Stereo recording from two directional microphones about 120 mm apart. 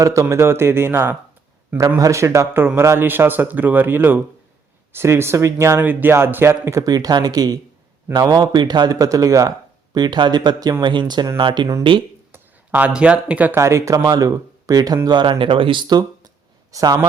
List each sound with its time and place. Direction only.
0.0 s a man's voice: 25° right (ahead or behind); by 12.0 s 45° right (ahead or behind)
12.3 s speech: 15° right (ahead or behind)
13.6 s speech: 25° right (ahead or behind)